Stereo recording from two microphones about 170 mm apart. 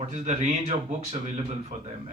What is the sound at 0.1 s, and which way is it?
A man's voice, 45° right (ahead or behind).